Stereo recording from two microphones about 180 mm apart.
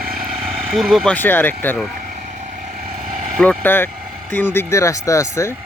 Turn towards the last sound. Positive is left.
turn(degrees=15)  # may be behind; listen again after turning